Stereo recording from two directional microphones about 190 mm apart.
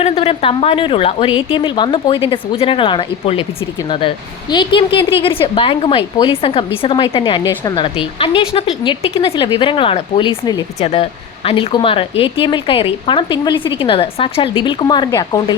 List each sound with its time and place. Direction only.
0.0 s a woman's voice: 30° left (ahead or behind)